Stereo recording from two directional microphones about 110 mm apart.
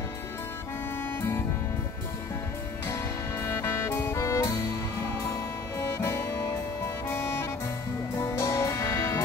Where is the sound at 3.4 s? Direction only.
20° left (ahead or behind).